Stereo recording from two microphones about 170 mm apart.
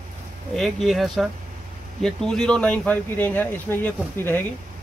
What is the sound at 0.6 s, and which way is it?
Speech, centre (ahead or behind).